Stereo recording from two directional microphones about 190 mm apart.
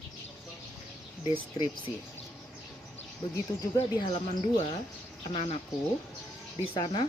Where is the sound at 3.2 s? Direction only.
25° left (ahead or behind).